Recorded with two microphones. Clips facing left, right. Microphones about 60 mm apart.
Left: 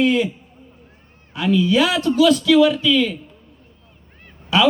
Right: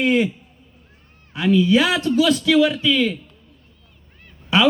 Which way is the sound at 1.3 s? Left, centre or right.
Centre.